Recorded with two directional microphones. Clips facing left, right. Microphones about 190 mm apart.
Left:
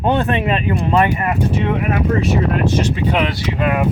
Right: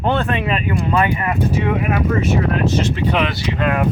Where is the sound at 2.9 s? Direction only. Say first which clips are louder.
Left 1 dB; 10° left (ahead or behind).